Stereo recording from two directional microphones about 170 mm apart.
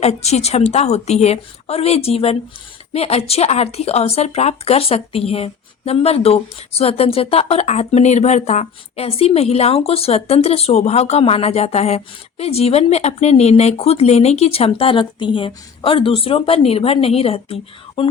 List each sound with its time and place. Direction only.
0.0 s speech: 40° left (ahead or behind)